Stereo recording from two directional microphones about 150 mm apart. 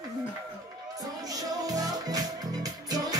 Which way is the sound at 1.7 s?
25° right (ahead or behind).